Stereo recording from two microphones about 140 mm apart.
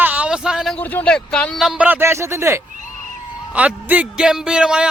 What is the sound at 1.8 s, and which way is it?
Speech, 15° right (ahead or behind).